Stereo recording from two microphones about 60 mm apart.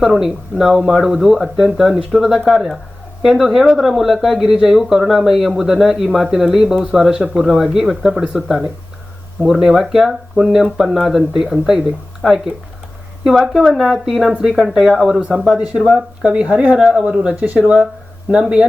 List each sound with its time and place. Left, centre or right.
0.0 s speech: centre
13.2 s speech: centre
15.4 s speech: centre
16.7 s speech: centre